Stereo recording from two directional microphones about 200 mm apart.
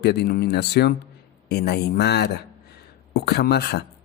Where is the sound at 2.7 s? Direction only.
55° left (ahead or behind).